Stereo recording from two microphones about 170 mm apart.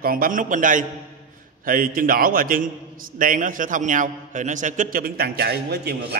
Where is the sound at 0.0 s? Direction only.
55° right (ahead or behind).